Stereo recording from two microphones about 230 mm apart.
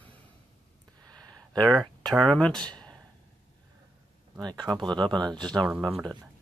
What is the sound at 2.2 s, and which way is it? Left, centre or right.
Speech, centre.